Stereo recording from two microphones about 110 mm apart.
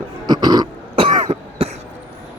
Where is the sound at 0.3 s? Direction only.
40° right (ahead or behind).